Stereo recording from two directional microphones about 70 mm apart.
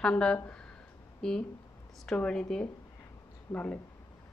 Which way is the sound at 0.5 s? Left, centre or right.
Centre.